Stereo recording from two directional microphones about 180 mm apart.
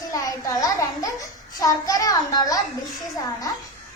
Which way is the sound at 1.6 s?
20° left (ahead or behind).